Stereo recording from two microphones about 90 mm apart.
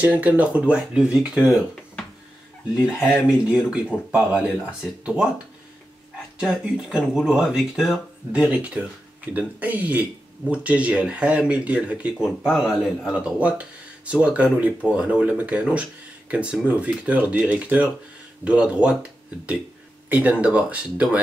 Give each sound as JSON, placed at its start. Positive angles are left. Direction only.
{"t": 0.0, "sound": "speech", "side_deg": -15}
{"t": 3.1, "sound": "speech", "side_deg": -10}
{"t": 6.4, "sound": "speech", "side_deg": -10}
{"t": 20.1, "sound": "speech", "side_deg": -15}